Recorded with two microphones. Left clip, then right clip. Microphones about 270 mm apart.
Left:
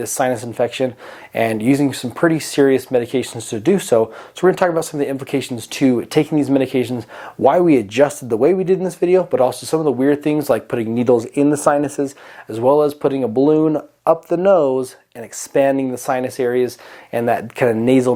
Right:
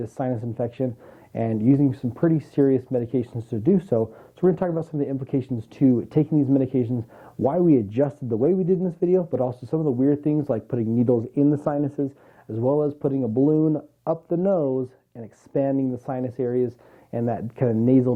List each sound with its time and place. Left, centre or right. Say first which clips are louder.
0.0 s speech: left 9 dB; centre
12.6 s speech: left 9 dB; left
12.9 s speech: left 7 dB; centre